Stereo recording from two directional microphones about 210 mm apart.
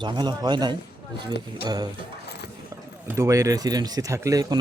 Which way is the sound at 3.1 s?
15° right (ahead or behind).